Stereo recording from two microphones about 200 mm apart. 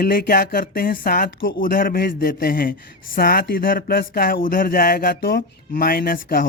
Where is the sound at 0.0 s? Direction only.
50° left (ahead or behind).